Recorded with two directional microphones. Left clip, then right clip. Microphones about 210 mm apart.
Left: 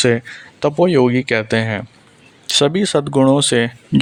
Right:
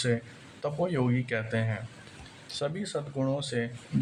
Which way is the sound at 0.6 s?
40° left (ahead or behind).